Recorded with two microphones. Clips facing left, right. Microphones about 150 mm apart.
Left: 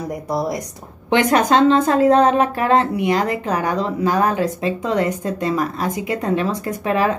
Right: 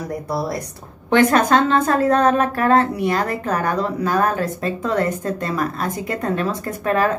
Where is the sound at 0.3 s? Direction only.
15° left (ahead or behind).